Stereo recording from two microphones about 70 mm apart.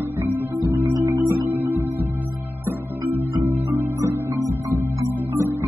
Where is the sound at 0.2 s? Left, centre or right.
Right.